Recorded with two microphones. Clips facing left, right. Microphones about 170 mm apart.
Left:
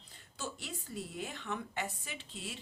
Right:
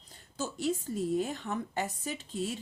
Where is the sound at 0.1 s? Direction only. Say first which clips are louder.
Right 6 dB; 40° right (ahead or behind).